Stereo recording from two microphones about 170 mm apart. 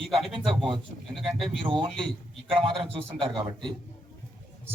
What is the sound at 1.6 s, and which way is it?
A man's voice, 30° right (ahead or behind).